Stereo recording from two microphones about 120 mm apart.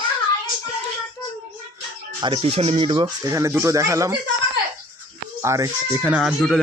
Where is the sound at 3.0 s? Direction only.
25° right (ahead or behind).